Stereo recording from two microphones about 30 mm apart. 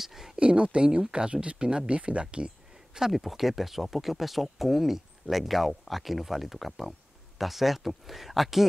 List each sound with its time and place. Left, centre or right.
0.0 s a sound: centre
0.4 s speech: right
3.1 s speech: centre